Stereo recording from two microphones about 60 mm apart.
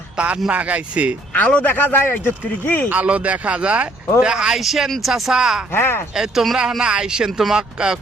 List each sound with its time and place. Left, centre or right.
0.2 s speech: centre
1.3 s speech: left
2.9 s speech: right
5.7 s speech: left
6.1 s speech: centre